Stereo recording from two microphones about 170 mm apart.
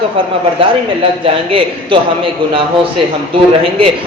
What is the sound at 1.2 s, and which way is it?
A man's voice, 30° right (ahead or behind).